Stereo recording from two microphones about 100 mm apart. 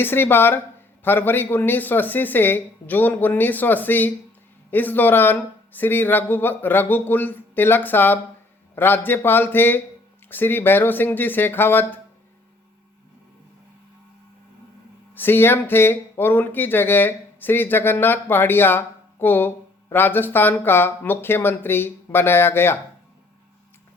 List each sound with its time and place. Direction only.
0.0 s speech: 20° left (ahead or behind)
15.1 s speech: 20° left (ahead or behind)